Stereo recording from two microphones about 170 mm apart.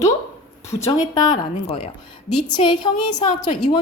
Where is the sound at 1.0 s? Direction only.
25° left (ahead or behind).